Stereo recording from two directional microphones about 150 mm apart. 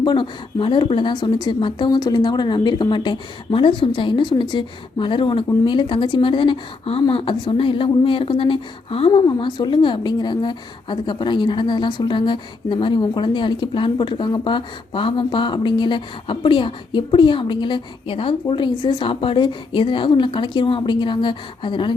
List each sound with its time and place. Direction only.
0.0 s speech: 30° left (ahead or behind)